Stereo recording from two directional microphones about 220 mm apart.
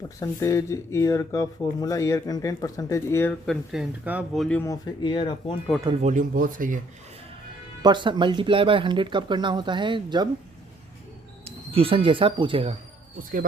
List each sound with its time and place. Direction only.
0.2 s speech: 15° left (ahead or behind)
5.8 s speech: 20° right (ahead or behind)
6.1 s speech: 35° right (ahead or behind)
7.8 s speech: 20° right (ahead or behind)
11.4 s speech: 25° right (ahead or behind)